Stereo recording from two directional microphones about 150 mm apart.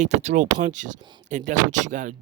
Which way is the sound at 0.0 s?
50° right (ahead or behind).